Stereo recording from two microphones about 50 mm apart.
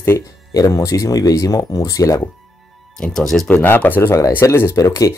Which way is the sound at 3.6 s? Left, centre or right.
Left.